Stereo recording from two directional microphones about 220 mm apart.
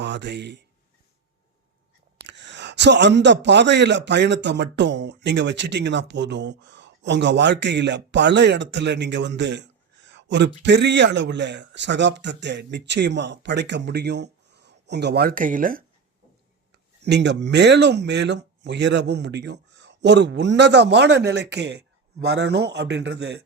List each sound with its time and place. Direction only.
0.0 s a man's voice: 50° right (ahead or behind)
2.2 s speech: 55° right (ahead or behind)
17.0 s speech: 50° right (ahead or behind)